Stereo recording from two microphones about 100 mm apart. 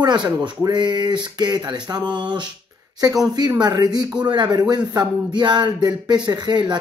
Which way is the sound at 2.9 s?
40° right (ahead or behind).